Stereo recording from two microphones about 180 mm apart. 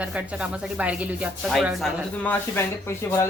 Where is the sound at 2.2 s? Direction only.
10° left (ahead or behind).